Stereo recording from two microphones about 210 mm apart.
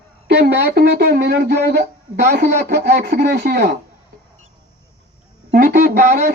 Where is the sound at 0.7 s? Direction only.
50° right (ahead or behind).